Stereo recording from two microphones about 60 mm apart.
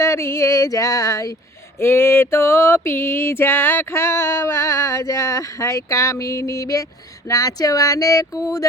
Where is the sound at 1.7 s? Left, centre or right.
Left.